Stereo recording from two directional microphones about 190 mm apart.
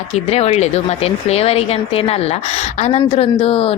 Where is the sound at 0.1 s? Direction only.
35° left (ahead or behind).